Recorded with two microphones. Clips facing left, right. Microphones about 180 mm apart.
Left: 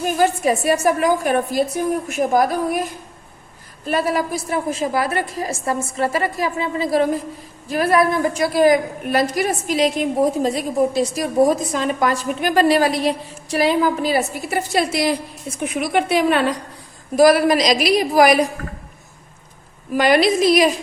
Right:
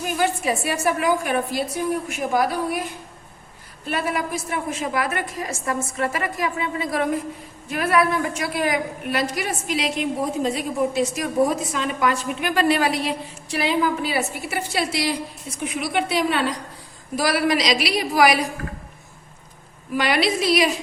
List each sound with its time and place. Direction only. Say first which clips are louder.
0.0 s a woman's voice: left 5 dB; 40° left (ahead or behind)
3.8 s a woman's voice: left 5 dB; 40° left (ahead or behind)
19.9 s a woman's voice: left 6 dB; 45° left (ahead or behind)